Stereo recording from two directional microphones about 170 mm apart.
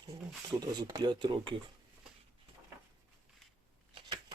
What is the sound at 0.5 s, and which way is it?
Speech, 25° right (ahead or behind).